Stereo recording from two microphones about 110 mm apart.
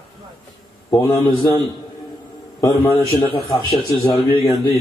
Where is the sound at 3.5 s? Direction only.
35° left (ahead or behind).